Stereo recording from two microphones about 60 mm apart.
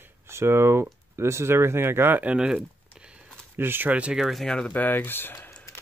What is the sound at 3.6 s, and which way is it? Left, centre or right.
Speech, right.